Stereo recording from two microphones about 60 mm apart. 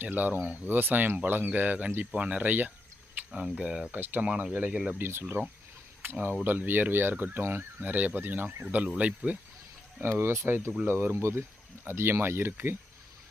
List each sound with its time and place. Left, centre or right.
0.0 s speech: right
3.4 s speech: centre
3.9 s speech: right
4.9 s speech: right
7.8 s speech: right
10.0 s speech: right